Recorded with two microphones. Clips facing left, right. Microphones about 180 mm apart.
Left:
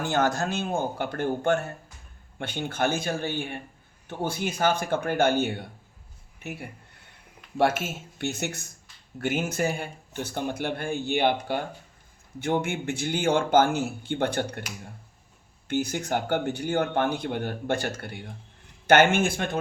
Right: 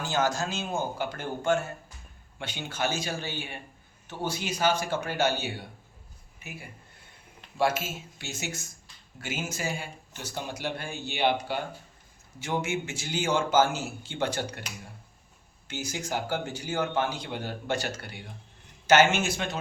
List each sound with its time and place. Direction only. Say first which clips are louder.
0.0 s a man's voice: left 3 dB; 60° left (ahead or behind)
15.6 s a man's voice: left 8 dB; 60° left (ahead or behind)